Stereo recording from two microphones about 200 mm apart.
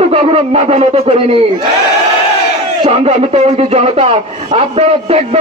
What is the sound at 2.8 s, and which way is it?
Speech, 30° right (ahead or behind).